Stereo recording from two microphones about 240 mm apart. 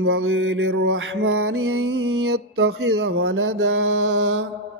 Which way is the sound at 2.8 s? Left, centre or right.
Right.